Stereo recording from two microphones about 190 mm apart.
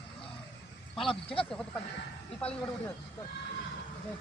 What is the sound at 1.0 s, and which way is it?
Speech, 30° left (ahead or behind).